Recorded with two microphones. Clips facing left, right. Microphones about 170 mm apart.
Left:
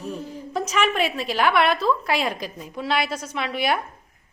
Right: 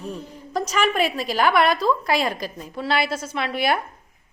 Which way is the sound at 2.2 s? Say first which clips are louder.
Right 1 dB; 5° right (ahead or behind).